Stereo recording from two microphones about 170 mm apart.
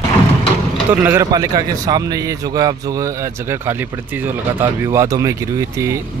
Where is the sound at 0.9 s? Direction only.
15° right (ahead or behind).